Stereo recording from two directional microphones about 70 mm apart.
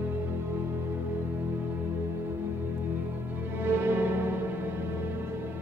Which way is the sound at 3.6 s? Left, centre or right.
Right.